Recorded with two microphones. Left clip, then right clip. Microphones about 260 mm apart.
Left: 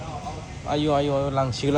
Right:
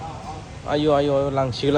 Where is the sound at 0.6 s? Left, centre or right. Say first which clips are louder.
Right 4 dB; right.